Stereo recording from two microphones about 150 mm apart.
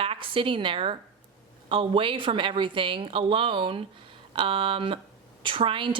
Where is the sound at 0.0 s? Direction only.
35° right (ahead or behind).